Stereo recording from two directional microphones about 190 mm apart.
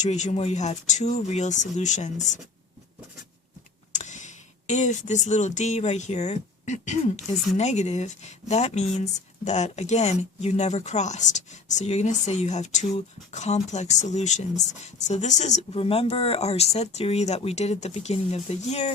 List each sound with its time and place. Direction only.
0.0 s speech: 35° left (ahead or behind)
3.9 s speech: 40° left (ahead or behind)